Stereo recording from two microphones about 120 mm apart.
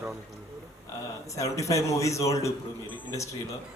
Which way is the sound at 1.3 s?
25° left (ahead or behind).